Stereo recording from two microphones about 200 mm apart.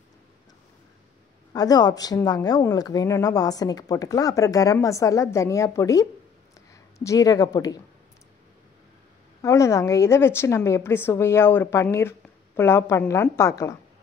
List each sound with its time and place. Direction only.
1.5 s speech: 20° left (ahead or behind)
9.4 s speech: 15° left (ahead or behind)